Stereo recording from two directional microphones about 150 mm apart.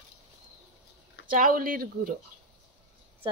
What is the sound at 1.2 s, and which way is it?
Speech, 65° right (ahead or behind).